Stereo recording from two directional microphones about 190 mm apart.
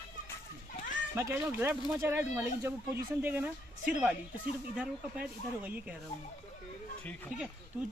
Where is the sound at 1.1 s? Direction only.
15° right (ahead or behind).